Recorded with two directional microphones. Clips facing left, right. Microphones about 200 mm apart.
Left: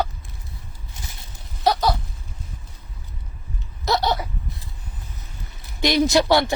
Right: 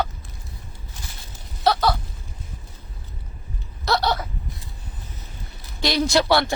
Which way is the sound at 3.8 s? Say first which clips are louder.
Left 1 dB; 15° left (ahead or behind).